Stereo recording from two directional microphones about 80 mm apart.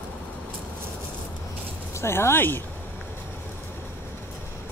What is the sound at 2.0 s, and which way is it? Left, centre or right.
Speech, left.